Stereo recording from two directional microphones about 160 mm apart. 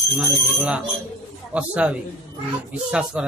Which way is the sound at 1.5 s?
10° right (ahead or behind).